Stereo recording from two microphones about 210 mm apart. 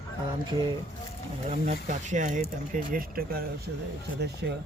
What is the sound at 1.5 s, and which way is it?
Speech, 35° right (ahead or behind).